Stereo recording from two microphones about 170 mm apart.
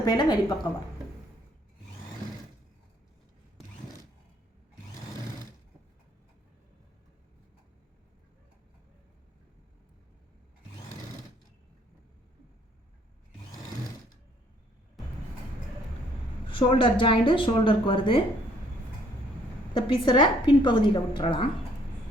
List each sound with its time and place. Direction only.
0.0 s a woman's voice: 25° left (ahead or behind)
16.5 s a woman's voice: 30° left (ahead or behind)
19.7 s a woman's voice: 30° left (ahead or behind)